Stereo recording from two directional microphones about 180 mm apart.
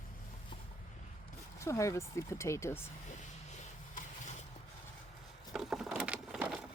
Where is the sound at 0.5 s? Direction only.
25° left (ahead or behind).